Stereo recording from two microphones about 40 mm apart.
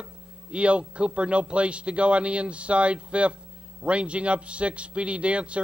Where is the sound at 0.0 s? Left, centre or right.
Right.